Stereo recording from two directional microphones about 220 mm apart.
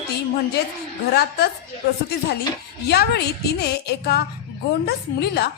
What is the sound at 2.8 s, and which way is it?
A woman's voice, 45° left (ahead or behind).